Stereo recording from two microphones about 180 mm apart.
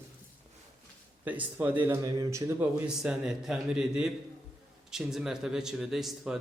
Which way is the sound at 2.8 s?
5° right (ahead or behind).